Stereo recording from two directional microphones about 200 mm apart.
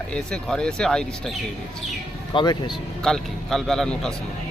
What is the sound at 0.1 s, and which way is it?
Speech, 5° left (ahead or behind).